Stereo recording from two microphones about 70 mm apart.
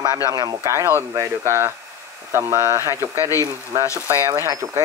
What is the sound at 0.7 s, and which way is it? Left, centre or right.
Speech, right.